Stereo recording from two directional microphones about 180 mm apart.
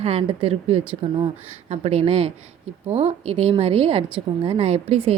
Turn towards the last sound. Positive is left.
turn(degrees=-35)  # may be behind; listen again after turning